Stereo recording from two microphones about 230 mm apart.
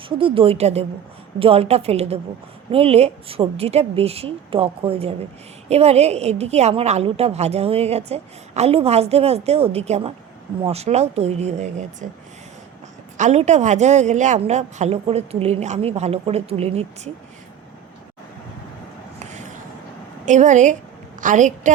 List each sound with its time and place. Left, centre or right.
0.2 s a woman's voice: right
13.1 s a woman's voice: right
19.2 s a sound: right
20.2 s a woman's voice: right